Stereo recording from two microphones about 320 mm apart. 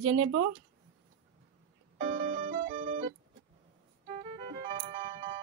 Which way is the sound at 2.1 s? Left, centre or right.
Centre.